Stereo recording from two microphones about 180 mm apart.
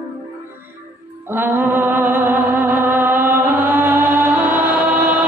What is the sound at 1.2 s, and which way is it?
Music, 10° right (ahead or behind).